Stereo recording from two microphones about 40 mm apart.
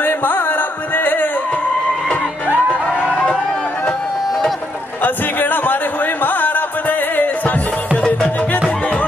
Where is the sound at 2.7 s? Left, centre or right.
Left.